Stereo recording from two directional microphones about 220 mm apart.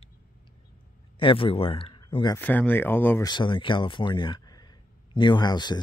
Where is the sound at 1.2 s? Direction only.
25° left (ahead or behind).